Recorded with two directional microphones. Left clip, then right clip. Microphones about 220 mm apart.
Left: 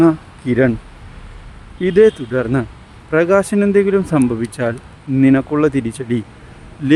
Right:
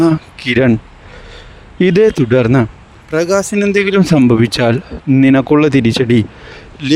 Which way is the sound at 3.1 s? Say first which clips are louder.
Even; centre (ahead or behind).